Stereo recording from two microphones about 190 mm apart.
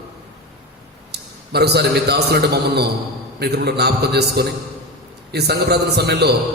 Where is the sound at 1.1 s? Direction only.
60° right (ahead or behind).